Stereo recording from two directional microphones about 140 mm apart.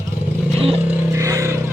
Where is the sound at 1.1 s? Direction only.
20° right (ahead or behind).